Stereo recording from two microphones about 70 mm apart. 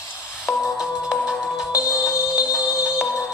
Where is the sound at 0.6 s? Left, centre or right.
Centre.